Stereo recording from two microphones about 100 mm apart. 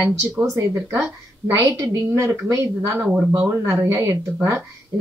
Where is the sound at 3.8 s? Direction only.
30° right (ahead or behind).